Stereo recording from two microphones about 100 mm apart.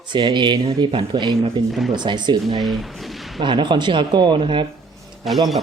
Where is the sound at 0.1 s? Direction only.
50° right (ahead or behind).